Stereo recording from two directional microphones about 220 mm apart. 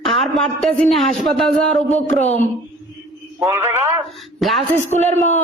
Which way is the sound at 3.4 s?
15° right (ahead or behind).